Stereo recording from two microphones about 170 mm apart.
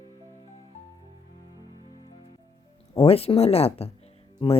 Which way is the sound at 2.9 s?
35° left (ahead or behind).